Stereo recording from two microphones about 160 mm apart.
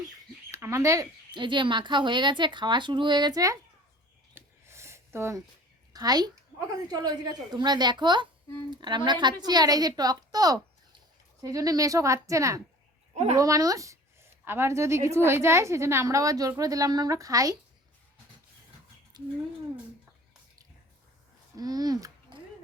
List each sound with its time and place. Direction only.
0.5 s speech: 20° right (ahead or behind)
1.3 s speech: 30° right (ahead or behind)
4.4 s a sound: 15° right (ahead or behind)
5.9 s speech: 25° right (ahead or behind)
19.1 s speech: 25° right (ahead or behind)
21.5 s a child's voice: 25° right (ahead or behind)